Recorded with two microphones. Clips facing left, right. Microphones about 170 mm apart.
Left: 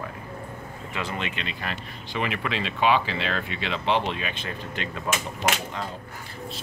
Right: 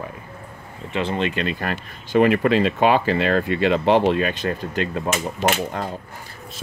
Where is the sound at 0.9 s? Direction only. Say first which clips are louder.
Right 9 dB; 30° right (ahead or behind).